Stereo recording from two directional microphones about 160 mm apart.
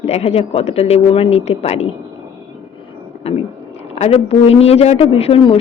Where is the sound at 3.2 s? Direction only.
40° left (ahead or behind).